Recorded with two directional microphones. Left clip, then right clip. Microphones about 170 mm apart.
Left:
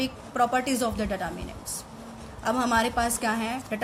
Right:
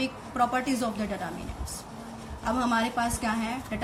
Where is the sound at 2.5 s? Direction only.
50° left (ahead or behind).